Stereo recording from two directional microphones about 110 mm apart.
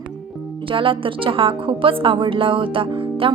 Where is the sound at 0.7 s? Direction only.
50° right (ahead or behind).